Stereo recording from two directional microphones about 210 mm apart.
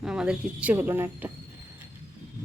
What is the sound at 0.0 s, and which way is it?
Speech, 5° right (ahead or behind).